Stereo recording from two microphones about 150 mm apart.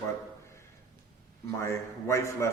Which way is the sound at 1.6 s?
20° left (ahead or behind).